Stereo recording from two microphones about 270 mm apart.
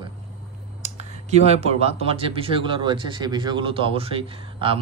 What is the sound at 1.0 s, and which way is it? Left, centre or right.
Speech, right.